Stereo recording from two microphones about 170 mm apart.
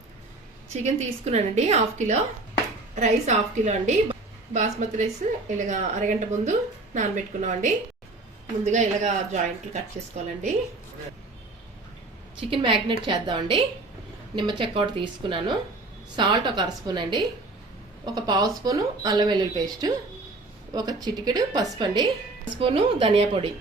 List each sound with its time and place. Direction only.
0.7 s a woman's voice: 40° right (ahead or behind)
12.4 s a woman's voice: 30° right (ahead or behind)